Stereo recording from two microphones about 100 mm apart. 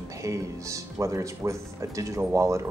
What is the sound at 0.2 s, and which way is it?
Speech, 30° right (ahead or behind).